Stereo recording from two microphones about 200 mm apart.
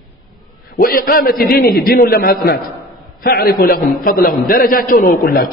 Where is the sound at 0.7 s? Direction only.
45° left (ahead or behind).